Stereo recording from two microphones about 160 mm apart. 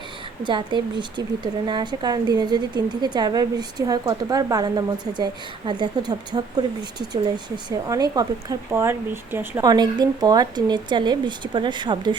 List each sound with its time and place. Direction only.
0.4 s speech: 30° right (ahead or behind); by 9.6 s 15° right (ahead or behind)
9.6 s speech: 25° right (ahead or behind)